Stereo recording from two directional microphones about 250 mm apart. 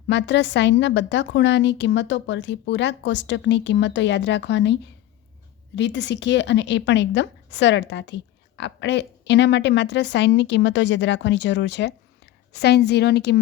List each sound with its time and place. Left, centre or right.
0.1 s speech: left